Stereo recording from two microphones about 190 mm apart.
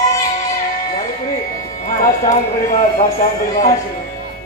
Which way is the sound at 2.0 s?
45° left (ahead or behind).